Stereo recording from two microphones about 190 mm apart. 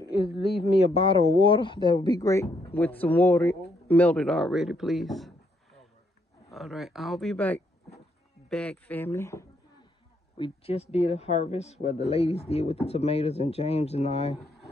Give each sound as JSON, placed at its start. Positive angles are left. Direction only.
{"t": 0.9, "sound": "speech", "side_deg": 30}
{"t": 6.5, "sound": "speech", "side_deg": 0}
{"t": 10.3, "sound": "speech", "side_deg": 30}